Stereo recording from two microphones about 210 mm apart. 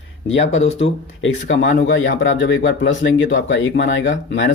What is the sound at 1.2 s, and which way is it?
Speech, 60° left (ahead or behind).